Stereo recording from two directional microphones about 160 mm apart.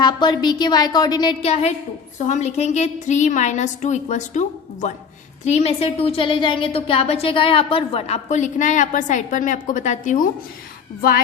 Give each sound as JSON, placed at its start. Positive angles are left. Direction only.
{"t": 0.0, "sound": "a woman's voice", "side_deg": 25}